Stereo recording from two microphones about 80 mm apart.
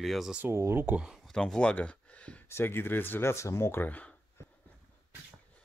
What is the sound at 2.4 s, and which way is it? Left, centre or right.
Speech, left.